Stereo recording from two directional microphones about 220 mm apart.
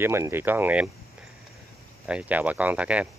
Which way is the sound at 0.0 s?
10° right (ahead or behind).